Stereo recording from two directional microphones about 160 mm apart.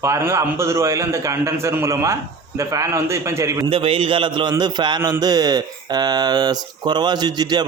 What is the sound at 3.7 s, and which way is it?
A man's voice, 35° right (ahead or behind).